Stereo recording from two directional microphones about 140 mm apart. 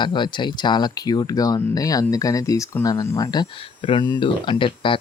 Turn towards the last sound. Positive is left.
turn(degrees=40)  # may be behind; listen again after turning